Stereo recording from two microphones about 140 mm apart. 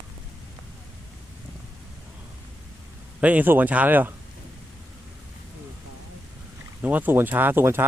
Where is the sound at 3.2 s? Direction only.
10° right (ahead or behind).